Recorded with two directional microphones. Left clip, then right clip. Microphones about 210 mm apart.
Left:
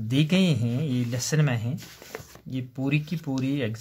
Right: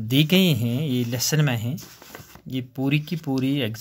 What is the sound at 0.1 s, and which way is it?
Speech, 25° right (ahead or behind).